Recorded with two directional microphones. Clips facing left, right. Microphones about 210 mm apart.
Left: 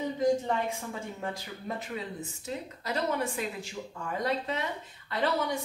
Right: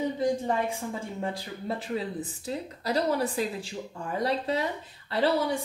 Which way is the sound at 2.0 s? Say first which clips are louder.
Right 5 dB; 35° right (ahead or behind).